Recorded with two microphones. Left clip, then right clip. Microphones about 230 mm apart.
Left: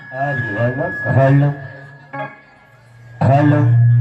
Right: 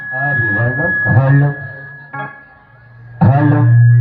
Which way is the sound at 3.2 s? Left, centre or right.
Left.